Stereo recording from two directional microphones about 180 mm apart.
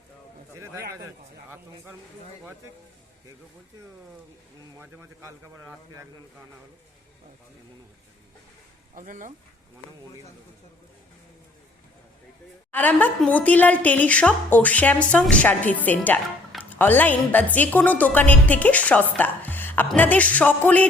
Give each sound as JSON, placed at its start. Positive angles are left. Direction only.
{"t": 1.0, "sound": "a man's voice", "side_deg": -15}
{"t": 4.8, "sound": "a man's voice", "side_deg": -10}
{"t": 9.0, "sound": "speech", "side_deg": -45}
{"t": 12.7, "sound": "a woman's voice", "side_deg": 10}